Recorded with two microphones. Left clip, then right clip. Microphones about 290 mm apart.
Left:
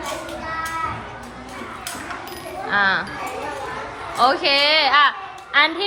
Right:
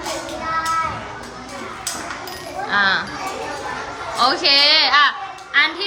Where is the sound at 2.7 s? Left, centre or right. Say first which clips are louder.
Right 1 dB; centre.